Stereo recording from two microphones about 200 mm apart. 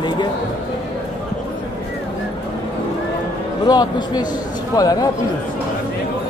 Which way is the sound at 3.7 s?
20° left (ahead or behind).